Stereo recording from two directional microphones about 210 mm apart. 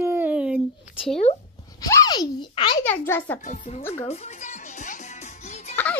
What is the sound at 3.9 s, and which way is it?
Music, 30° left (ahead or behind).